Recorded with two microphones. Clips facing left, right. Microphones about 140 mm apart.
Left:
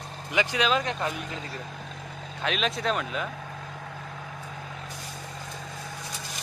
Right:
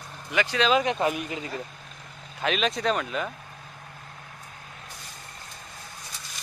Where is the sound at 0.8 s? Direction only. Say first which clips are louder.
Right 5 dB; 15° right (ahead or behind).